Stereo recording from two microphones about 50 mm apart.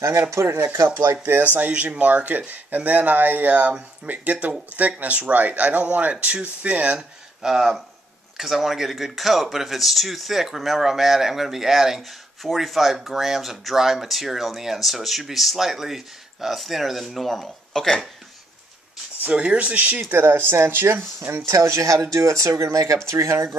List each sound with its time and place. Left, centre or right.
0.3 s speech: right
0.8 s speech: right
7.0 s speech: centre
19.3 s speech: right
20.0 s speech: right
21.5 s speech: right